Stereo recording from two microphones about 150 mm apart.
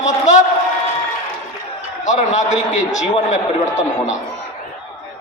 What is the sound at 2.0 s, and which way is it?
A man's voice, 55° left (ahead or behind).